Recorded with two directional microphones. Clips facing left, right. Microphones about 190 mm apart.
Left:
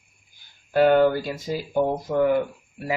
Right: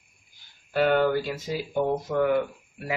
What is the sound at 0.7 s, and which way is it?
Speech, 45° left (ahead or behind).